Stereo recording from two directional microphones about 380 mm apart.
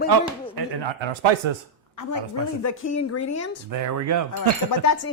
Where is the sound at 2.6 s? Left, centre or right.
Left.